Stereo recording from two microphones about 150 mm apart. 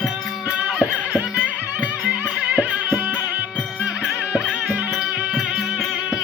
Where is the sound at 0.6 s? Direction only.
10° right (ahead or behind).